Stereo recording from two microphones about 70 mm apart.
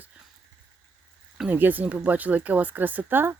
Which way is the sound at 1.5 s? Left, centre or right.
Right.